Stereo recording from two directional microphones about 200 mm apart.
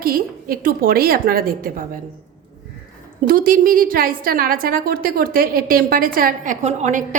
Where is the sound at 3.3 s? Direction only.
45° right (ahead or behind).